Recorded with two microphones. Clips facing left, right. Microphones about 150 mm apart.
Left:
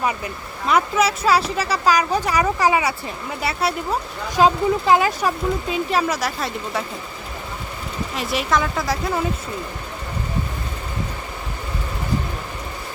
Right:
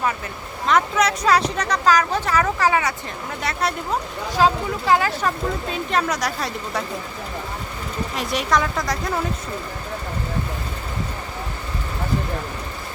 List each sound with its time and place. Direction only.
0.7 s speech: 5° left (ahead or behind)
4.4 s speech: 20° left (ahead or behind)
5.7 s speech: 5° left (ahead or behind)
8.1 s speech: centre (ahead or behind)